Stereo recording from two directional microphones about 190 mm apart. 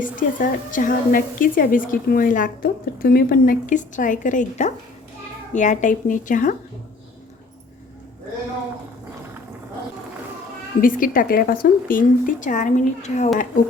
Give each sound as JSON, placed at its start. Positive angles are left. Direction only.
{"t": 0.0, "sound": "a woman's voice", "side_deg": 45}
{"t": 10.8, "sound": "a woman's voice", "side_deg": 45}